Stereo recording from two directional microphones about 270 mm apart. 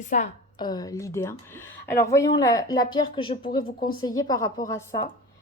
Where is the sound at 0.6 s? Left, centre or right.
Centre.